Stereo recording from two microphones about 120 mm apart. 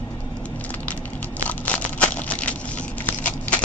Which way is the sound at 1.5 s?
10° left (ahead or behind).